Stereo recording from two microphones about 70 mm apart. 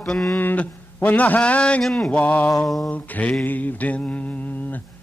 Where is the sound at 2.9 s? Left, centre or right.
Centre.